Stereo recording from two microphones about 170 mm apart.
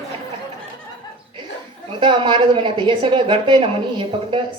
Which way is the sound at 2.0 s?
30° right (ahead or behind).